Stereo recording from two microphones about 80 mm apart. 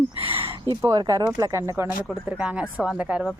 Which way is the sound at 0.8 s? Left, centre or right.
Right.